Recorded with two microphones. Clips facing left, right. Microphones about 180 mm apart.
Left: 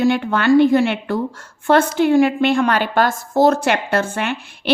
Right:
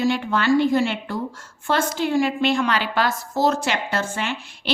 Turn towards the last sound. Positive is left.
turn(degrees=55)  # may be behind; listen again after turning